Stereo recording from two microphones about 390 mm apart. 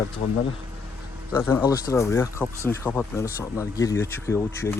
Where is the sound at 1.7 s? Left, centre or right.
Centre.